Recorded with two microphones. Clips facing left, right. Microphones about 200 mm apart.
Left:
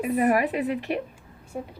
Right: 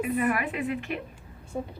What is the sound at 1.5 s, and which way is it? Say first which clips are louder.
Speech: right 1 dB; 10° left (ahead or behind).